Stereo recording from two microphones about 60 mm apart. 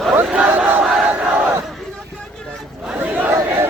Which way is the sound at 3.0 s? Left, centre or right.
Right.